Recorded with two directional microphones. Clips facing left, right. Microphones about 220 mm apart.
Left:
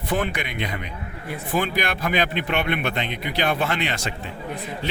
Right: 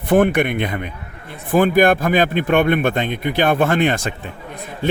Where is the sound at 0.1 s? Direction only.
55° right (ahead or behind).